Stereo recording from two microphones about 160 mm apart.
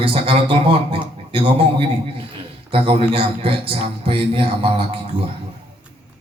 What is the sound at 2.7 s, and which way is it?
Speech, 35° right (ahead or behind).